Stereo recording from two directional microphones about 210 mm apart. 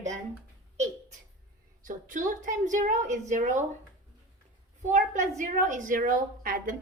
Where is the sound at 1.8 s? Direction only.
40° right (ahead or behind).